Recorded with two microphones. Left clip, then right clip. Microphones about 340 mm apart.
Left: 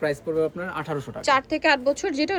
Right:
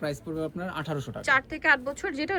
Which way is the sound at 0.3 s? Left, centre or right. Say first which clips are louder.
Left 7 dB; centre.